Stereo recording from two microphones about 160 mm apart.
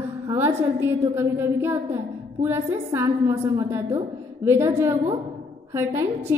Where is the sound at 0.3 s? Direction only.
15° right (ahead or behind).